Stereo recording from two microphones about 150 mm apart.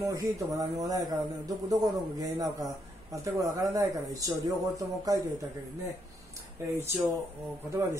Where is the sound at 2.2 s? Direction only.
25° right (ahead or behind).